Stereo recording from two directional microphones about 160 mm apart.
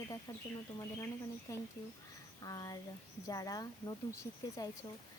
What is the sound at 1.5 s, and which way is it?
Speech, 20° left (ahead or behind).